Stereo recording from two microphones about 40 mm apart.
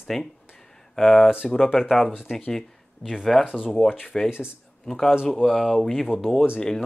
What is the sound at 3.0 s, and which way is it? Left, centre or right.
Speech, left.